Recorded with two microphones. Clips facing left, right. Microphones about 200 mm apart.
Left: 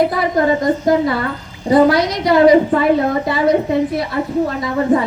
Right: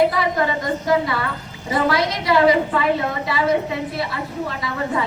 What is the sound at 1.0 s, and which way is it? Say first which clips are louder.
A woman's voice: left 6 dB; 40° left (ahead or behind).